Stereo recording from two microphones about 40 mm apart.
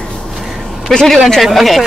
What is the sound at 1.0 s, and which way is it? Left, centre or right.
Speech, centre.